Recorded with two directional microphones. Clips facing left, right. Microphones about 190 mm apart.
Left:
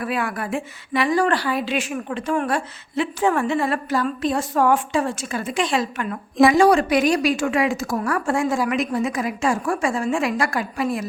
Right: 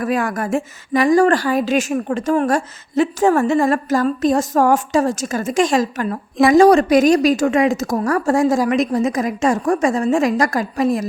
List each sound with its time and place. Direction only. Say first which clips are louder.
0.0 s a woman's voice: right 5 dB; 45° right (ahead or behind)